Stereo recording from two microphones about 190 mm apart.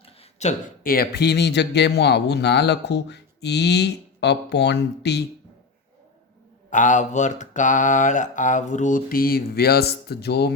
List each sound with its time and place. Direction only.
0.0 s a sound: 35° left (ahead or behind)
0.9 s speech: 60° left (ahead or behind)
6.7 s mantra: 40° left (ahead or behind); by 10.5 s 60° left (ahead or behind)